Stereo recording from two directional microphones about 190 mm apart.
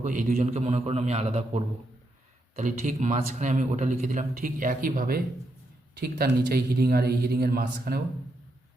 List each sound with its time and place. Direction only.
0.0 s speech: 45° right (ahead or behind)